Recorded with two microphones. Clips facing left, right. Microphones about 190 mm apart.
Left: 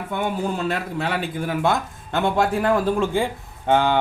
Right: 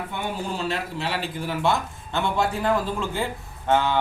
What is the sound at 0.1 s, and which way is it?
Speech, 50° left (ahead or behind).